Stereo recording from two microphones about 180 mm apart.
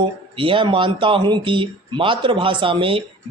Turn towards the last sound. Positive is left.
turn(degrees=-30)  # may be behind; listen again after turning